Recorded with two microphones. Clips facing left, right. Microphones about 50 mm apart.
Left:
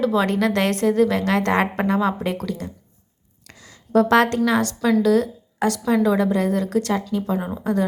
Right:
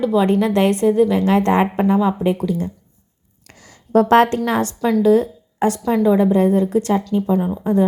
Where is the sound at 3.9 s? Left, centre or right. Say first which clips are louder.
Right 3 dB; right; by 7.3 s centre.